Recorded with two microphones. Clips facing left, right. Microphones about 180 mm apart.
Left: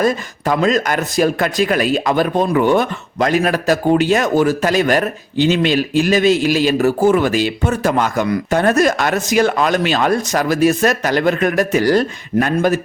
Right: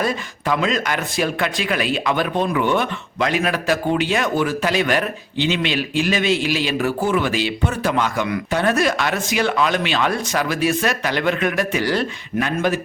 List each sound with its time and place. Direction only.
0.0 s speech: 45° left (ahead or behind)